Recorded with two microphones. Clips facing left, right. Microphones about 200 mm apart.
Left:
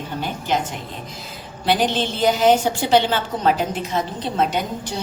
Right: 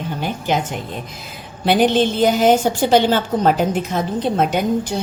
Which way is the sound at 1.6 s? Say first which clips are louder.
Right 5 dB; 55° right (ahead or behind).